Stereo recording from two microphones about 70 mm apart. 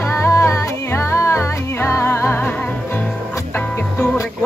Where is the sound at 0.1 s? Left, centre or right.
Left.